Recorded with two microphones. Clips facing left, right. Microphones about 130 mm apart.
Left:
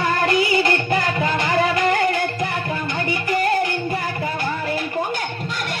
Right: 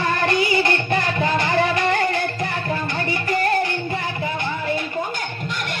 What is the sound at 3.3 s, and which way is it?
Music, 25° left (ahead or behind).